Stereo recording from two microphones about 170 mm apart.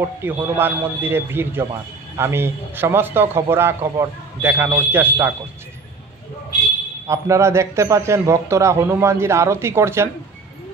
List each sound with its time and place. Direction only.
0.0 s a man's voice: 15° right (ahead or behind)
7.1 s a man's voice: 15° right (ahead or behind)